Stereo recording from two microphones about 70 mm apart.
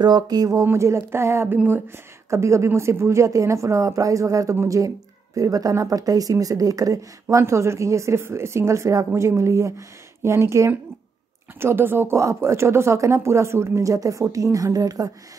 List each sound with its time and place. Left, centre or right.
0.0 s speech: right
0.7 s a woman's voice: right
11.6 s speech: right